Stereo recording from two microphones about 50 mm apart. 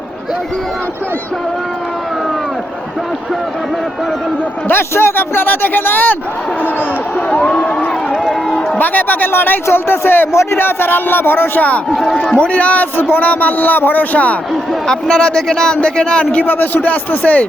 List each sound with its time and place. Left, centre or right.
4.7 s speech: left
7.4 s speech: left
8.8 s speech: left
11.6 s a man's voice: left
14.7 s a man's voice: centre; by 17.4 s left